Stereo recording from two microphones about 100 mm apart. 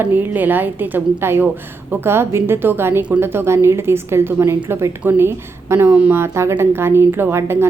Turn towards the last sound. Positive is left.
turn(degrees=-25)  # may be behind; listen again after turning